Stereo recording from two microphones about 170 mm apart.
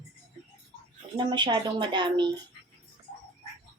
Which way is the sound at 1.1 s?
30° right (ahead or behind).